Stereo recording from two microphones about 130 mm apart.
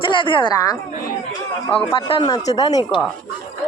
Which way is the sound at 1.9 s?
40° left (ahead or behind).